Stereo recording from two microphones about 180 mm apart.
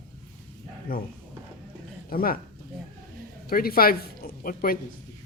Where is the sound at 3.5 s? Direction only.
55° left (ahead or behind).